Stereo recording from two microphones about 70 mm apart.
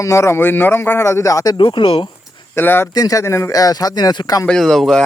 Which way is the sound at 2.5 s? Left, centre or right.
Left.